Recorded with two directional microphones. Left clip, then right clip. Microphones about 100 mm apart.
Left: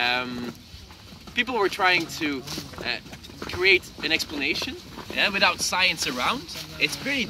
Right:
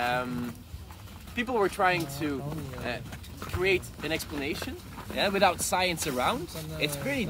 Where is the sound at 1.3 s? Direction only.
40° right (ahead or behind).